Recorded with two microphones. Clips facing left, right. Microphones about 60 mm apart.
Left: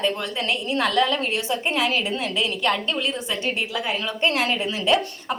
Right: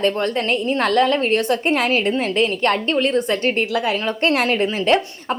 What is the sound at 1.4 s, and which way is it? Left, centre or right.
Speech, right.